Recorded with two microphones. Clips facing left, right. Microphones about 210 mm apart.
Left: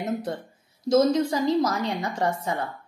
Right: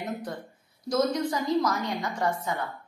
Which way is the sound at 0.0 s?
25° left (ahead or behind).